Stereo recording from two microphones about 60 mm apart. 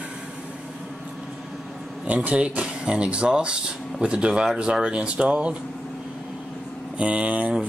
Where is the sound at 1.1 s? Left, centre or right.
Centre.